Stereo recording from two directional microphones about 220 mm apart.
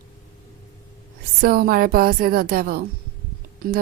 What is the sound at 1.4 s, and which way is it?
Speech, 45° right (ahead or behind).